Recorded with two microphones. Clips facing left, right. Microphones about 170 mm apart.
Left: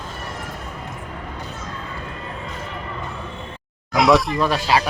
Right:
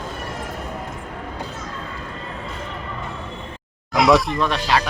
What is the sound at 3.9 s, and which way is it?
Speech, centre (ahead or behind).